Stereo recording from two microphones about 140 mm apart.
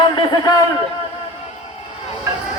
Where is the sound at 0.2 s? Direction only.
25° left (ahead or behind).